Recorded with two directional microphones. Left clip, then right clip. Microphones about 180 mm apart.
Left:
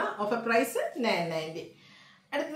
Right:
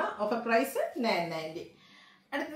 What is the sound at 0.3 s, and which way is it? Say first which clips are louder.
A woman's voice: left 2 dB; 15° left (ahead or behind).